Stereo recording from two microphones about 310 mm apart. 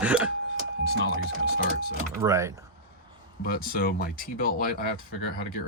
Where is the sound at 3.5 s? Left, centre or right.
Left.